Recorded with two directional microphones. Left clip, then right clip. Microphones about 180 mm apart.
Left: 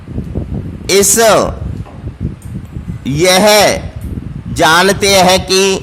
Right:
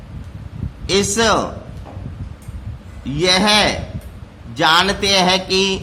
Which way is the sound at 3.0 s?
50° left (ahead or behind).